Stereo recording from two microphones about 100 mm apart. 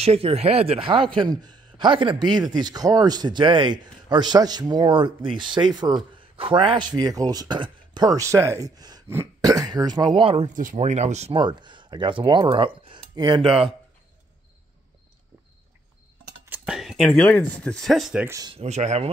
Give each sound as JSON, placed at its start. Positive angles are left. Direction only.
{"t": 0.0, "sound": "speech", "side_deg": -85}
{"t": 6.3, "sound": "speech", "side_deg": -65}
{"t": 11.3, "sound": "speech", "side_deg": -50}
{"t": 16.4, "sound": "whispering", "side_deg": -20}
{"t": 16.7, "sound": "a sound", "side_deg": 0}
{"t": 17.1, "sound": "speech", "side_deg": 15}
{"t": 18.5, "sound": "speech", "side_deg": -90}